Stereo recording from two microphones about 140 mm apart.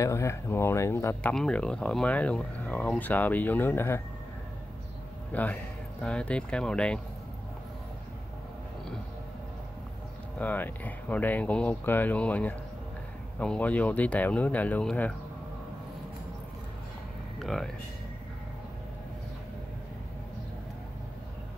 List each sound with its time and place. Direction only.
0.0 s speech: 20° left (ahead or behind)
1.2 s speech: 5° left (ahead or behind)
5.3 s speech: 10° left (ahead or behind)
10.4 s speech: 10° left (ahead or behind)
17.4 s a sound: centre (ahead or behind)